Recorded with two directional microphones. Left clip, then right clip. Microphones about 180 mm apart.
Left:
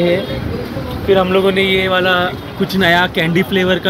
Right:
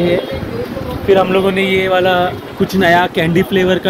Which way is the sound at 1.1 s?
15° right (ahead or behind).